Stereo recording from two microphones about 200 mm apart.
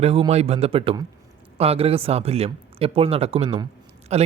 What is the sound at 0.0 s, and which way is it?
Speech, 30° right (ahead or behind).